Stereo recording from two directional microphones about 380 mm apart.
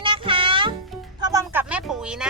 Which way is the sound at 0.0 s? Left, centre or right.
Centre.